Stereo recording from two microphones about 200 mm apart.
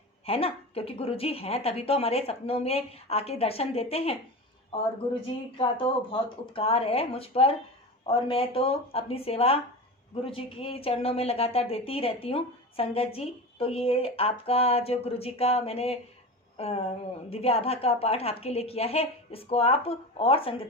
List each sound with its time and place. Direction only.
0.3 s a woman's voice: 30° left (ahead or behind)
5.5 s a woman's voice: 25° left (ahead or behind)